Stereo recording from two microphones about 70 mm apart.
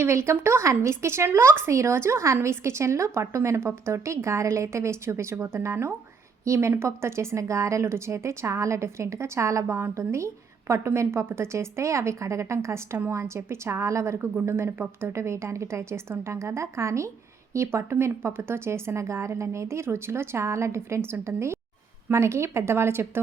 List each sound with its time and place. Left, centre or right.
0.0 s a woman's voice: right